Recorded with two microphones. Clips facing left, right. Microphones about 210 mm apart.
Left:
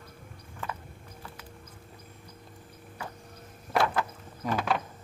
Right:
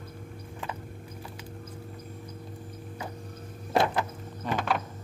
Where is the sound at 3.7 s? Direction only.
20° right (ahead or behind).